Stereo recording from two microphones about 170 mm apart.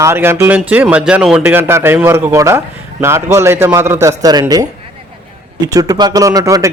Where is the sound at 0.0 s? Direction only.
15° right (ahead or behind).